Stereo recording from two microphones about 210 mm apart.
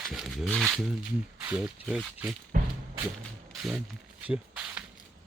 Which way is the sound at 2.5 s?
40° right (ahead or behind).